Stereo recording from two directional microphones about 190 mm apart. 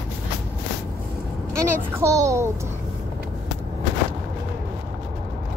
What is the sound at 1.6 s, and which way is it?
Speech, 15° right (ahead or behind).